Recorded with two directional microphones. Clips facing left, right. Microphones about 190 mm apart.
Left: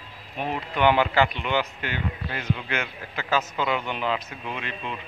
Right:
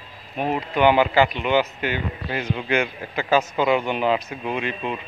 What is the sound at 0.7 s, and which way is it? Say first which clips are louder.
A man's voice: right 3 dB; 5° right (ahead or behind).